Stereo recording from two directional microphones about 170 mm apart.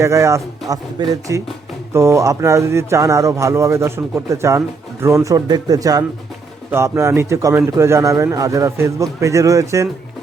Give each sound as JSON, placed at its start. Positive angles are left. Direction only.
{"t": 0.0, "sound": "speech", "side_deg": -15}